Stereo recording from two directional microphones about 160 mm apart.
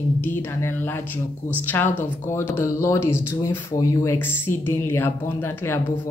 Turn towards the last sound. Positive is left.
turn(degrees=15)  # may be behind; listen again after turning